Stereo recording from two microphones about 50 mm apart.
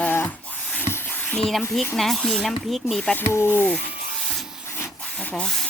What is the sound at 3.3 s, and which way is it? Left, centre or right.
Speech, left.